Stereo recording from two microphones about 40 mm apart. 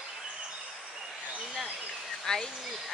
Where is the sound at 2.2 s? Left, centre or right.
Centre.